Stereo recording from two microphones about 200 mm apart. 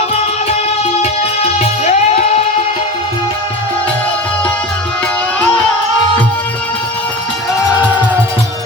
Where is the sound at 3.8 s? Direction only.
5° left (ahead or behind).